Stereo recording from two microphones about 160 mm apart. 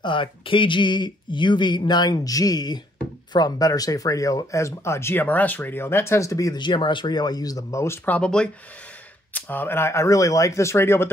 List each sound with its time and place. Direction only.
0.0 s speech: 30° left (ahead or behind); by 11.1 s 15° left (ahead or behind)